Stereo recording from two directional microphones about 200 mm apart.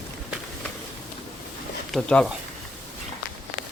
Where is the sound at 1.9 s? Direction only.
5° left (ahead or behind).